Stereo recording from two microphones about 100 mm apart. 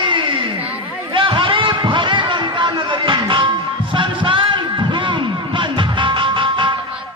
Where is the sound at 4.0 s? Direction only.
55° right (ahead or behind).